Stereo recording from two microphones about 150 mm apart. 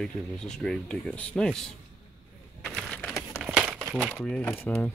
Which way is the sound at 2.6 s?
5° left (ahead or behind).